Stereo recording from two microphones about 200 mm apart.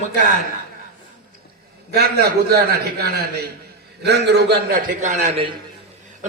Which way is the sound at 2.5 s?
50° right (ahead or behind).